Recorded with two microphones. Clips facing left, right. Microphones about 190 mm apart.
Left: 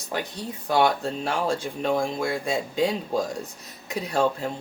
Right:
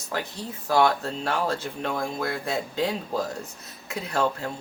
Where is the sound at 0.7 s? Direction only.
15° left (ahead or behind).